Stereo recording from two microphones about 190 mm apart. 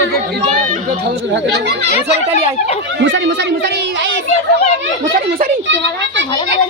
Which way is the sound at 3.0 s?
65° right (ahead or behind).